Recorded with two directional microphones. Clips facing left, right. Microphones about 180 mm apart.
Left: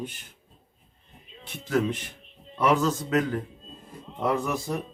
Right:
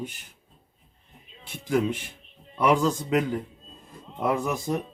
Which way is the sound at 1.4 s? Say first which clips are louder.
Right 1 dB; 10° right (ahead or behind).